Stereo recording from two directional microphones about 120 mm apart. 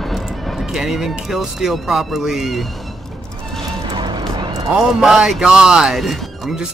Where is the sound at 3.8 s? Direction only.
35° right (ahead or behind).